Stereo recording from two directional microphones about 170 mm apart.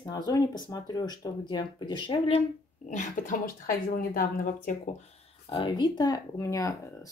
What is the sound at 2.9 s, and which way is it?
Speech, 50° left (ahead or behind).